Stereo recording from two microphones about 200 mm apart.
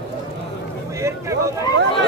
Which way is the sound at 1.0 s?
15° right (ahead or behind).